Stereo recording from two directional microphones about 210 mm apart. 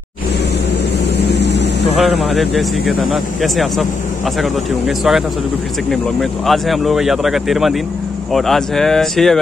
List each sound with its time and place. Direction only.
1.1 s vehicle: 55° left (ahead or behind)
2.0 s speech: centre (ahead or behind)
6.4 s speech: centre (ahead or behind)